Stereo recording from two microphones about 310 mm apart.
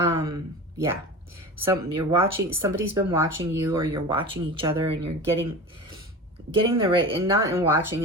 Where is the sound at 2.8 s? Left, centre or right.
Centre.